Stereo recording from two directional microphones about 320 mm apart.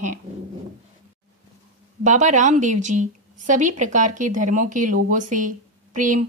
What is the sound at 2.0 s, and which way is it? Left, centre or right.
A woman's voice, right.